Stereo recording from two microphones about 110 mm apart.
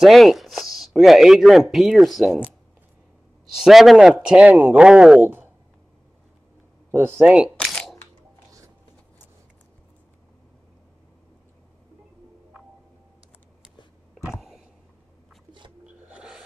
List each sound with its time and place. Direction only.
0.0 s speech: centre (ahead or behind)
3.6 s speech: centre (ahead or behind)
5.2 s speech: 20° right (ahead or behind)
6.9 s speech: 20° right (ahead or behind)
7.2 s speech: 10° right (ahead or behind)
7.5 s a sound: 5° left (ahead or behind)
15.8 s filing: 10° right (ahead or behind)